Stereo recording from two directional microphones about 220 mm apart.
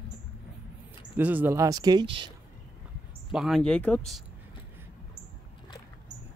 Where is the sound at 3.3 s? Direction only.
Centre (ahead or behind).